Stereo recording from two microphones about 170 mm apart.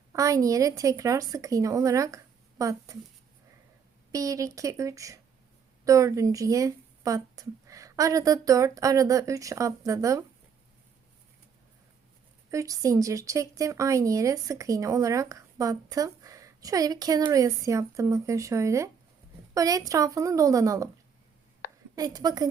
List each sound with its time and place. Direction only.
0.1 s speech: 20° right (ahead or behind)
4.1 s speech: 20° right (ahead or behind)
12.5 s speech: 20° right (ahead or behind)
21.9 s speech: 20° right (ahead or behind)